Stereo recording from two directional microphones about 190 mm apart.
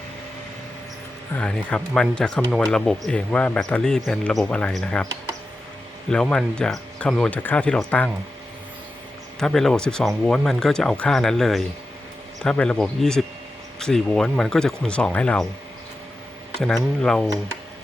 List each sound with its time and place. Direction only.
1.4 s speech: 5° left (ahead or behind)
6.1 s speech: 5° left (ahead or behind)
9.4 s speech: centre (ahead or behind)
16.6 s speech: 5° left (ahead or behind)